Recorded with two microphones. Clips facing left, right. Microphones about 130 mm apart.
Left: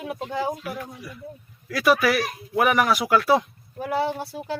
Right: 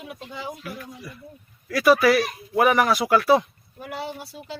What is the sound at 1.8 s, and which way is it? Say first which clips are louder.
Speech: right 3 dB; 20° right (ahead or behind).